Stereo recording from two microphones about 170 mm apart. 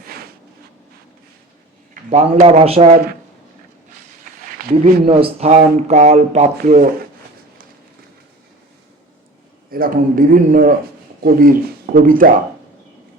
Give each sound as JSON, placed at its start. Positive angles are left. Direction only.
{"t": 0.0, "sound": "a sound", "side_deg": -65}
{"t": 2.0, "sound": "speech", "side_deg": -40}
{"t": 4.8, "sound": "speech", "side_deg": -35}
{"t": 6.7, "sound": "speech", "side_deg": -55}
{"t": 9.6, "sound": "speech", "side_deg": -60}